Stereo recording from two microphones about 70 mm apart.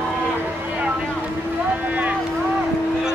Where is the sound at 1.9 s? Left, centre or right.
Right.